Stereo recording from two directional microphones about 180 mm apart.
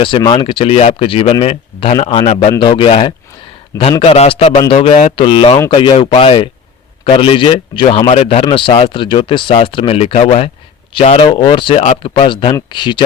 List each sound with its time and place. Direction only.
0.0 s speech: 30° left (ahead or behind)